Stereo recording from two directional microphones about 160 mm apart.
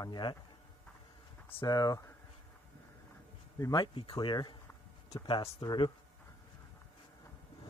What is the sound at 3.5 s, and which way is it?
Speech, 25° left (ahead or behind).